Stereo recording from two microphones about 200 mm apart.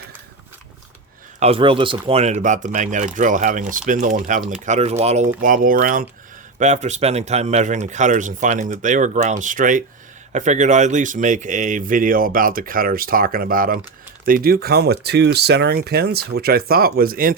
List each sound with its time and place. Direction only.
1.4 s a man's voice: 30° right (ahead or behind); by 17.3 s 45° right (ahead or behind)